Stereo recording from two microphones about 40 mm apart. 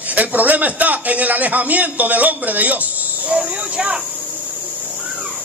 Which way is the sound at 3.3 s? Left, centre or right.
Right.